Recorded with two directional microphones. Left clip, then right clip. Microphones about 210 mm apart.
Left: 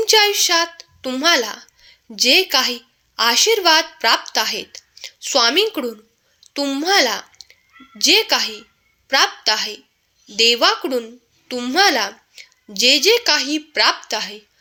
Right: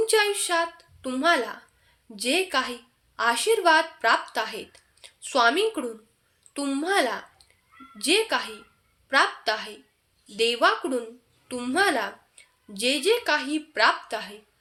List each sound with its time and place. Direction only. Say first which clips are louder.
0.0 s a woman's voice: left 8 dB; 30° left (ahead or behind)